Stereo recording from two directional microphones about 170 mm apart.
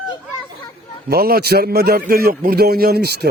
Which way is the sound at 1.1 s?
60° right (ahead or behind).